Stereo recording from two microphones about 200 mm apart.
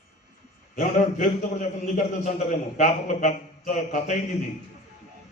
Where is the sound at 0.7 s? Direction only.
40° left (ahead or behind).